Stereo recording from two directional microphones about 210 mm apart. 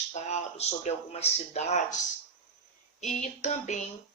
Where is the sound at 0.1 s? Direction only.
30° left (ahead or behind).